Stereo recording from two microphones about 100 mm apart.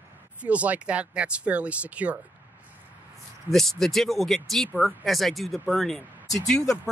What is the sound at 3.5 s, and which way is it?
Speech, 5° left (ahead or behind).